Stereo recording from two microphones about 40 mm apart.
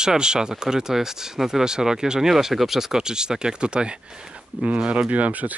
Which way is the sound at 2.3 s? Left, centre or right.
Centre.